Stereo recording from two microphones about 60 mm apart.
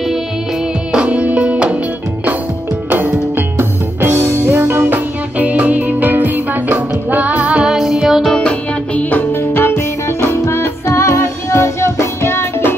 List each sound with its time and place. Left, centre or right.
0.9 s music: right
2.9 s music: right
7.7 s music: centre
8.3 s music: centre
9.3 s music: left